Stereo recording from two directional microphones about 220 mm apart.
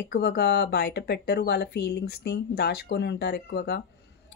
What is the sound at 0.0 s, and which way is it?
Speech, 45° left (ahead or behind).